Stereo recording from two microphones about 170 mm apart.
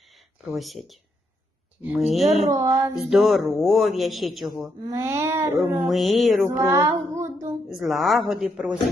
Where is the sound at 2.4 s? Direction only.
20° right (ahead or behind).